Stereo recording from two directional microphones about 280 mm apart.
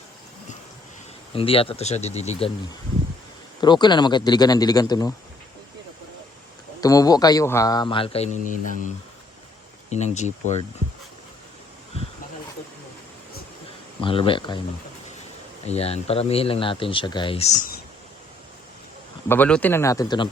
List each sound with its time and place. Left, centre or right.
1.3 s speech: centre
3.6 s speech: centre
6.8 s speech: centre
9.9 s speech: left
14.0 s speech: centre
15.6 s speech: left
19.3 s speech: centre